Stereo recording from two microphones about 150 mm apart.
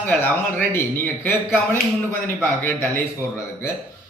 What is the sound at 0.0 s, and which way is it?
Speech, 10° left (ahead or behind).